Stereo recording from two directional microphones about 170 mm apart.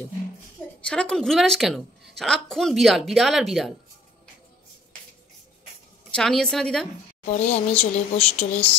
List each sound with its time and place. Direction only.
0.7 s a woman's voice: 5° left (ahead or behind)
6.1 s a woman's voice: 5° left (ahead or behind)
7.2 s speech: 40° left (ahead or behind)